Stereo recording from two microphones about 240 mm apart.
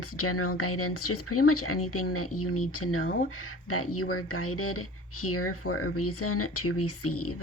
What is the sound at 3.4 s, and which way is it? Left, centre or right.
Speech, left.